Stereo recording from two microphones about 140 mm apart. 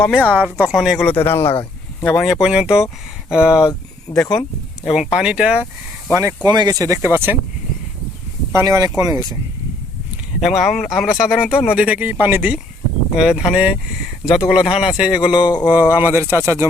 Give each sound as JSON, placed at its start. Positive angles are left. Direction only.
{"t": 0.0, "sound": "speech", "side_deg": 10}
{"t": 0.3, "sound": "speech", "side_deg": -10}
{"t": 1.0, "sound": "speech", "side_deg": 15}
{"t": 2.2, "sound": "speech", "side_deg": -5}
{"t": 4.1, "sound": "speech", "side_deg": 5}
{"t": 5.1, "sound": "speech", "side_deg": -5}
{"t": 6.1, "sound": "speech", "side_deg": -25}
{"t": 8.5, "sound": "speech", "side_deg": -25}
{"t": 10.4, "sound": "speech", "side_deg": 0}